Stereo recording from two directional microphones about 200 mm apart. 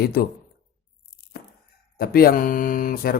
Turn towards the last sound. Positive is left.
turn(degrees=45)  # may be behind; listen again after turning